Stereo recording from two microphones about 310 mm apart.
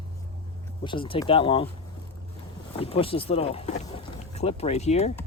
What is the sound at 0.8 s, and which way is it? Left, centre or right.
Speech, centre.